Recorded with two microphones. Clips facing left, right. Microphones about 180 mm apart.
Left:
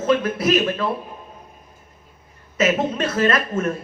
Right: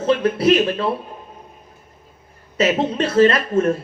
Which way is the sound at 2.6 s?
30° right (ahead or behind).